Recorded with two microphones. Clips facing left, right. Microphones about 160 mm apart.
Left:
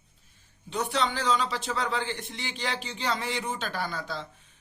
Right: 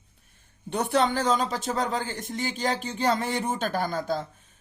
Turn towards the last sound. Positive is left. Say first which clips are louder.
# right 8 dB
turn(degrees=-45)  # may be behind; listen again after turning